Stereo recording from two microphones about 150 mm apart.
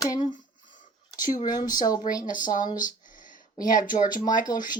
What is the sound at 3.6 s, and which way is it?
Speech, 65° left (ahead or behind).